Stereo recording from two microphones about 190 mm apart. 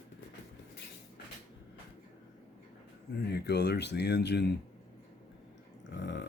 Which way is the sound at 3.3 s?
60° left (ahead or behind).